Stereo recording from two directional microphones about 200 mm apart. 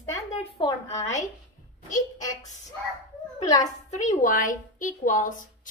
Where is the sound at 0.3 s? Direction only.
30° left (ahead or behind).